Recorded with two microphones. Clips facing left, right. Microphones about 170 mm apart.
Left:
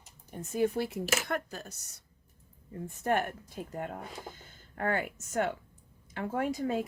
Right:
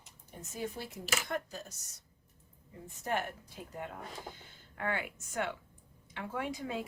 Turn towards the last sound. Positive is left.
turn(degrees=45)  # may be behind; listen again after turning